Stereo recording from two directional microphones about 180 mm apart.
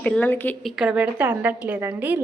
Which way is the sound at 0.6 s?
5° right (ahead or behind).